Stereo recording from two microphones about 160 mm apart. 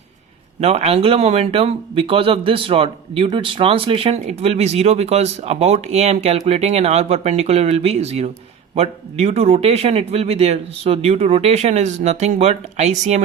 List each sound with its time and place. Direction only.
0.6 s speech: 40° right (ahead or behind)